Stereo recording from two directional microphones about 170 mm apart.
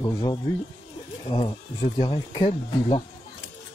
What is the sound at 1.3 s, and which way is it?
Speech, 25° left (ahead or behind).